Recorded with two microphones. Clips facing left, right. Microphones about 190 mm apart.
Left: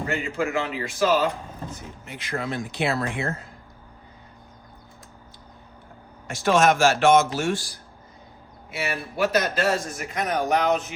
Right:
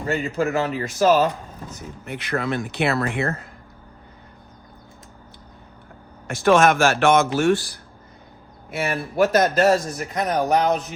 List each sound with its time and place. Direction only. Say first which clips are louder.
0.3 s speech: right 4 dB; 40° right (ahead or behind)
2.0 s speech: right 5 dB; 65° right (ahead or behind)
6.2 s speech: right 3 dB; 60° right (ahead or behind)
8.7 s a man's voice: right 5 dB; 50° right (ahead or behind)